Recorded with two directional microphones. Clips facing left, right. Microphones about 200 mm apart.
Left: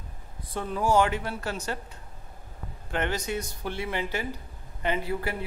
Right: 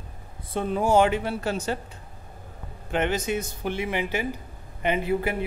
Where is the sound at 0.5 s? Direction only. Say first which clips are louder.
Right 3 dB; 20° right (ahead or behind).